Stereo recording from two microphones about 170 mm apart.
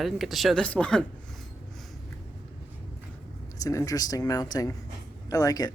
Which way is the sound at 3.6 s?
20° left (ahead or behind).